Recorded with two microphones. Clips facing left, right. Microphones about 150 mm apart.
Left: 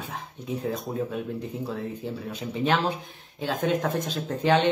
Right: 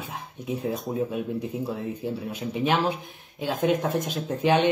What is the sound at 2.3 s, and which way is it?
Speech, 15° right (ahead or behind).